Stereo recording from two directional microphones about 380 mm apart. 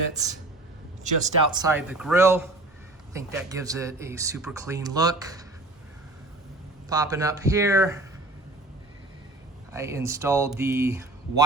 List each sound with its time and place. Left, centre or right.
1.2 s speech: centre
6.8 s speech: centre
9.7 s speech: centre